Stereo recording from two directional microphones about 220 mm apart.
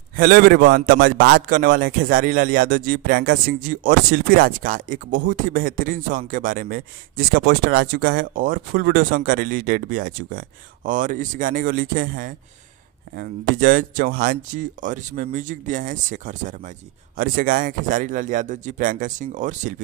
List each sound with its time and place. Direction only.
0.1 s a man's voice: 40° right (ahead or behind)